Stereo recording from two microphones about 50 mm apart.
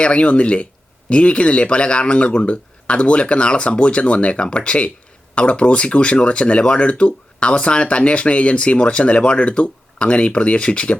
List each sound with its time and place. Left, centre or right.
0.0 s speech: left